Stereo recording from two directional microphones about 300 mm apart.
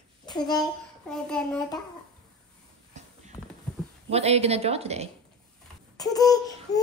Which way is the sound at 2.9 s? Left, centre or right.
Right.